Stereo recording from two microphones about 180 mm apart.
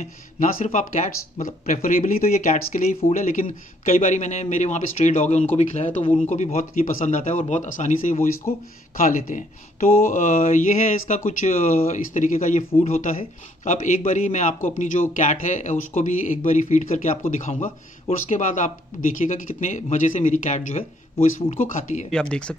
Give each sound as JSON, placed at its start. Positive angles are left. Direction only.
{"t": 0.0, "sound": "speech", "side_deg": 45}
{"t": 22.1, "sound": "speech", "side_deg": 5}